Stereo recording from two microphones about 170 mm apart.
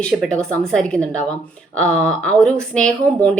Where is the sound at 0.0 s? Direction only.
5° left (ahead or behind).